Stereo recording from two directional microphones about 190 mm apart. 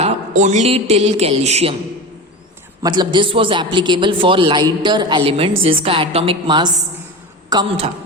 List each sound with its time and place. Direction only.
0.0 s a man's voice: 40° right (ahead or behind)
2.8 s a man's voice: 25° right (ahead or behind)